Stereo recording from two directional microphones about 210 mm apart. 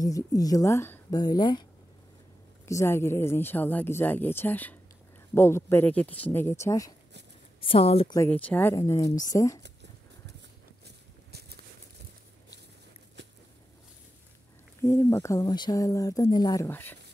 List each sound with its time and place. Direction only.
0.0 s speech: 15° left (ahead or behind)
7.6 s speech: 25° left (ahead or behind)
8.2 s speech: 5° left (ahead or behind)
11.3 s a sound: 50° right (ahead or behind)
14.8 s speech: 15° left (ahead or behind)